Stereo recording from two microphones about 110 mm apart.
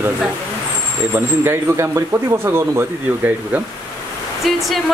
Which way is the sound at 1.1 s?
20° right (ahead or behind).